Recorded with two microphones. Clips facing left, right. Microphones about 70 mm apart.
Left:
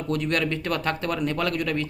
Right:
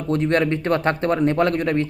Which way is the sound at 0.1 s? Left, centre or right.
Right.